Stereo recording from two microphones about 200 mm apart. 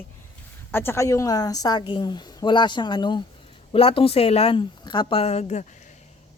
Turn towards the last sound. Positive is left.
turn(degrees=35)  # may be behind; listen again after turning